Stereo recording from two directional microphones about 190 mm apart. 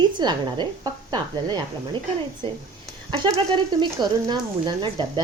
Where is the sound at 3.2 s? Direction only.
25° right (ahead or behind).